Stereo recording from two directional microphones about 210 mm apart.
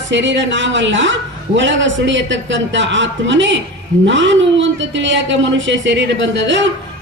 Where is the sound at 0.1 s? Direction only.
60° right (ahead or behind).